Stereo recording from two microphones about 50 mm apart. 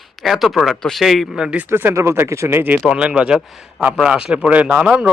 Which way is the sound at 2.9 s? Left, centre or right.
Right.